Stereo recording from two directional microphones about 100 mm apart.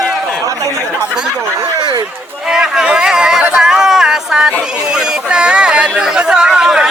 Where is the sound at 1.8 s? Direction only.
50° right (ahead or behind).